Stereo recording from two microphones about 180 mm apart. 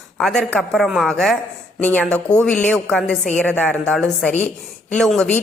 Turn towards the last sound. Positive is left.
turn(degrees=5)  # may be behind; listen again after turning